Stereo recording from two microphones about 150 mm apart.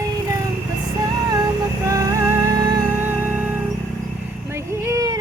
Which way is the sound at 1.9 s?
20° right (ahead or behind).